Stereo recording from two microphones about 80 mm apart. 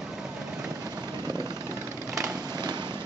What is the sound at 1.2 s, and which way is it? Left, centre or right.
Vehicle, right.